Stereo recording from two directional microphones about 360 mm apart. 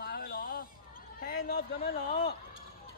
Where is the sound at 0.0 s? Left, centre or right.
Left.